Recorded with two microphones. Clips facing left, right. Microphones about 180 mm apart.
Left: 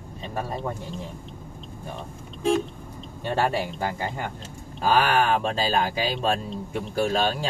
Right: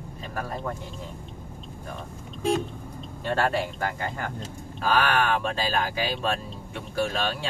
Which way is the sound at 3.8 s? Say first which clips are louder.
Left 1 dB; 25° left (ahead or behind).